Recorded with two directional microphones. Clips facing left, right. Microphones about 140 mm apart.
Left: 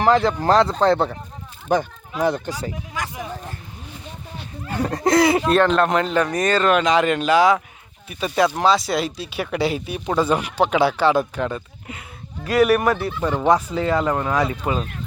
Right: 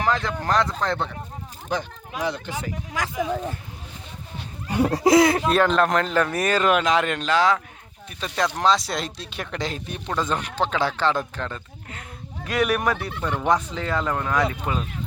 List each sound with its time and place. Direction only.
0.0 s speech: 35° left (ahead or behind)
1.7 s speech: 50° left (ahead or behind)
4.7 s speech: 5° right (ahead or behind)
6.3 s speech: 10° right (ahead or behind); by 14.8 s 10° left (ahead or behind)